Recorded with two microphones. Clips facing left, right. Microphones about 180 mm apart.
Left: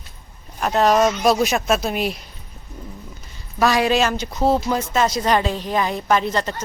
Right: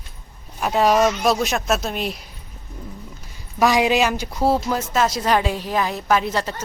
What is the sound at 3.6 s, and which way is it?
A woman's voice, 15° right (ahead or behind).